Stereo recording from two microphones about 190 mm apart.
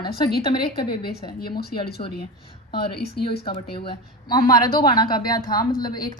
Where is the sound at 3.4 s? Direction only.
30° left (ahead or behind).